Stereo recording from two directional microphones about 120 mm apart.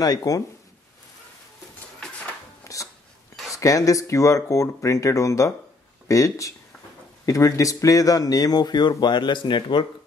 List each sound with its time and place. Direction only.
0.0 s speech: 30° left (ahead or behind)
2.6 s a sound: 25° left (ahead or behind)
3.5 s speech: 25° left (ahead or behind)